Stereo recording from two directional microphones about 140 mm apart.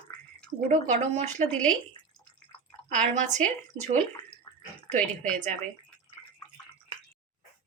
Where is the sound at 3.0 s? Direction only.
60° right (ahead or behind).